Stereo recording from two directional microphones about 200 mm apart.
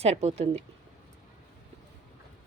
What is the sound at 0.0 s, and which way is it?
Speech, 30° right (ahead or behind).